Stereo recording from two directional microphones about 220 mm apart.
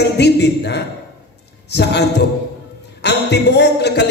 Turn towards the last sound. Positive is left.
turn(degrees=50)  # may be behind; listen again after turning